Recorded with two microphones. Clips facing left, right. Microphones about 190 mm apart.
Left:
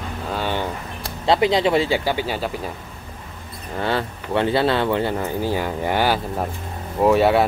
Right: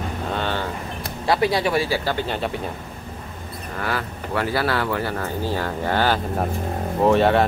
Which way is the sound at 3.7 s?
25° left (ahead or behind).